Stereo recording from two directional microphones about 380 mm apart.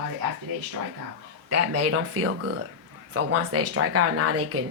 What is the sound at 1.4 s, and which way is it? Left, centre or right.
Speech, right.